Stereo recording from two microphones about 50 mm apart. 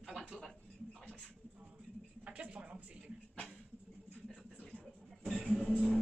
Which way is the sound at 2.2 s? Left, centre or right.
Right.